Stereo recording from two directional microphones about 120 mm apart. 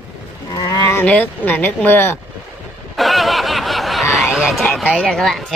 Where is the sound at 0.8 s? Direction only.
15° left (ahead or behind).